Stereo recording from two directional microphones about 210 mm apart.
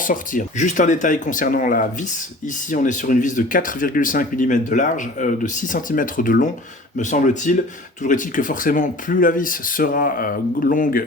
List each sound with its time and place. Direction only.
0.0 s speech: 40° left (ahead or behind)